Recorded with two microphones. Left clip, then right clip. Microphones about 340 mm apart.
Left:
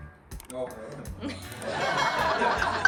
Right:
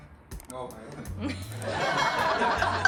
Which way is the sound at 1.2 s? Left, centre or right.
Centre.